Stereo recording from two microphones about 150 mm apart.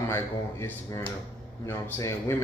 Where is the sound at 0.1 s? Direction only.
20° left (ahead or behind).